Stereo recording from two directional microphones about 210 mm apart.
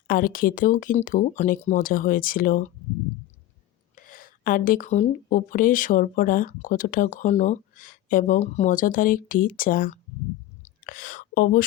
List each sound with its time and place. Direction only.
0.1 s speech: 40° left (ahead or behind)
3.9 s speech: 40° left (ahead or behind)